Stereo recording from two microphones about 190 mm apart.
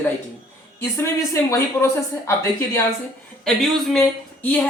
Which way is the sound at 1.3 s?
15° left (ahead or behind).